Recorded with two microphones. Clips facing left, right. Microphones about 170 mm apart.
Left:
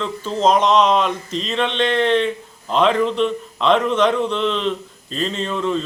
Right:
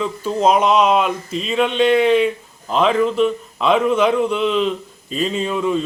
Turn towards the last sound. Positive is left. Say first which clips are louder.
# right 2 dB
turn(degrees=-10)  # may be behind; listen again after turning